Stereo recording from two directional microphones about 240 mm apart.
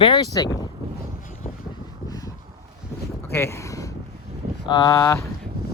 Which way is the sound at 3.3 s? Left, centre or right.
Centre.